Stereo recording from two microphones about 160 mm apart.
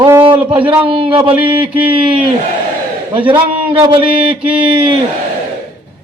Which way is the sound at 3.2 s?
30° right (ahead or behind).